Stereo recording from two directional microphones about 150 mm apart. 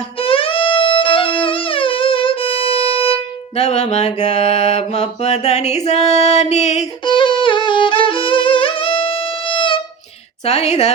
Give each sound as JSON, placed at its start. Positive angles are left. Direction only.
{"t": 0.2, "sound": "music", "side_deg": 35}
{"t": 3.5, "sound": "mantra", "side_deg": 45}
{"t": 7.0, "sound": "music", "side_deg": 35}
{"t": 10.4, "sound": "mantra", "side_deg": 45}